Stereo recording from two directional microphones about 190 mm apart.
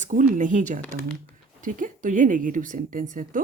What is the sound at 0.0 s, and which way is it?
Speech, 40° right (ahead or behind).